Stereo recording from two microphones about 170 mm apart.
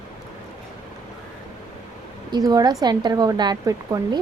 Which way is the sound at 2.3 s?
20° right (ahead or behind).